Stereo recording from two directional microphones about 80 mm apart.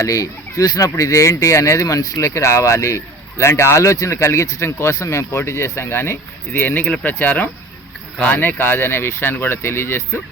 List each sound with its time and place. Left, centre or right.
0.0 s speech: left